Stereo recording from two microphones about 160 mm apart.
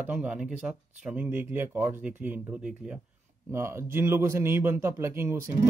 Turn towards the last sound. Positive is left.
turn(degrees=-15)  # may be behind; listen again after turning